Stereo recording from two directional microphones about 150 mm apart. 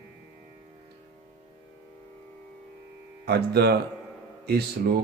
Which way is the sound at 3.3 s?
90° right.